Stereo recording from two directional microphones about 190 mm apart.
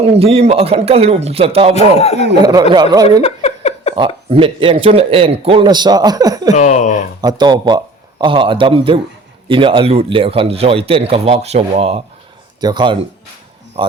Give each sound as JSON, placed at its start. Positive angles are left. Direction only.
{"t": 0.0, "sound": "speech", "side_deg": -30}
{"t": 1.7, "sound": "a man's voice", "side_deg": 35}
{"t": 2.3, "sound": "a man's voice", "side_deg": -20}
{"t": 3.2, "sound": "a sound", "side_deg": 35}
{"t": 3.9, "sound": "a man's voice", "side_deg": -25}
{"t": 6.5, "sound": "a sound", "side_deg": 40}
{"t": 7.2, "sound": "a man's voice", "side_deg": -20}